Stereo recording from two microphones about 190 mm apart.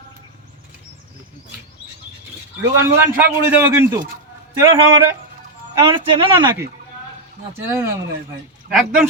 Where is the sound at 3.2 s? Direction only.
10° right (ahead or behind).